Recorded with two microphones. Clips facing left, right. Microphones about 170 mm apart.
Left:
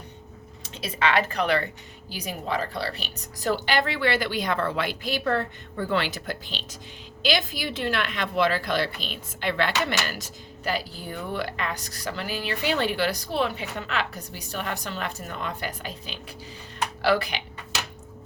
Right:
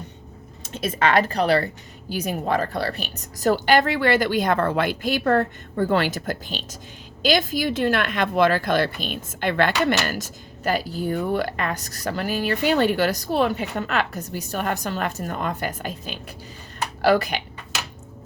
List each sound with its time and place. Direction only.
0.6 s speech: 45° right (ahead or behind)